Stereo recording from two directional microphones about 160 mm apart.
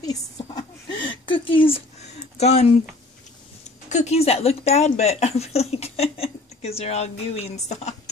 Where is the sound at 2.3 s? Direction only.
45° left (ahead or behind).